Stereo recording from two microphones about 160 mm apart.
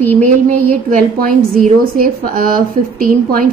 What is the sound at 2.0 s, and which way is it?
A woman's voice, 65° right (ahead or behind).